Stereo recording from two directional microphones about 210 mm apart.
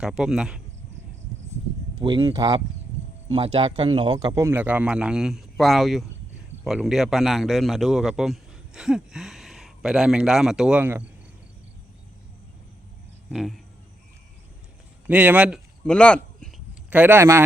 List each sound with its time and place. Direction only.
0.0 s a man's voice: centre (ahead or behind)
2.0 s a man's voice: 20° right (ahead or behind)
13.3 s a man's voice: centre (ahead or behind)
15.0 s speech: 5° right (ahead or behind)
15.8 s speech: 5° left (ahead or behind)
16.9 s speech: 10° right (ahead or behind)